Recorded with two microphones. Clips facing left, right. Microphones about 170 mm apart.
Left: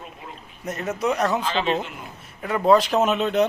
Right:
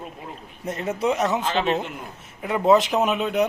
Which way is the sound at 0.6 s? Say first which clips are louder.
Right 1 dB; 30° right (ahead or behind).